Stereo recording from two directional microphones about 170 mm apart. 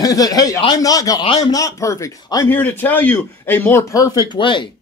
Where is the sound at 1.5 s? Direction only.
20° left (ahead or behind).